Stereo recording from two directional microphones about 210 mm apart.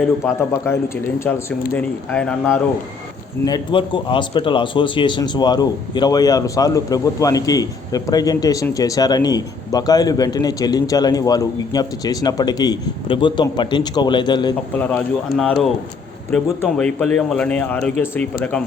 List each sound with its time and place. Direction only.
0.6 s speech: 10° left (ahead or behind)
3.4 s speech: 20° left (ahead or behind)
14.8 s a man's voice: 5° left (ahead or behind)